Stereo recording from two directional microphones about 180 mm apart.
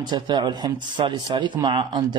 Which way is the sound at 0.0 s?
25° right (ahead or behind).